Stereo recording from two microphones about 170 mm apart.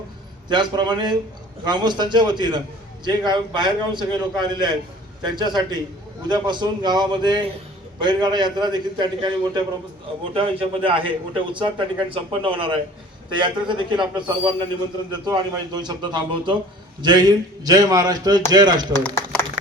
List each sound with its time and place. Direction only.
0.4 s speech: 25° right (ahead or behind)
10.3 s a man's voice: 30° right (ahead or behind)
19.0 s a sound: 10° left (ahead or behind)